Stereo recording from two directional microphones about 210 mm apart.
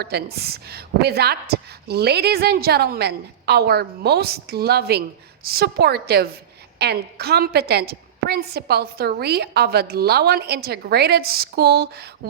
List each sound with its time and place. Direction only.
0.0 s a woman's voice: 50° right (ahead or behind)